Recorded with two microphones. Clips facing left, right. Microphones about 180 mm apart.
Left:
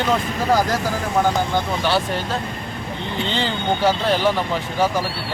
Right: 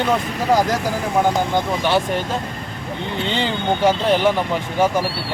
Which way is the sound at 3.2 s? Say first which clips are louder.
Right 2 dB; 15° right (ahead or behind).